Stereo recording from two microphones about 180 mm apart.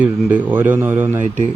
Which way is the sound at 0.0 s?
10° right (ahead or behind).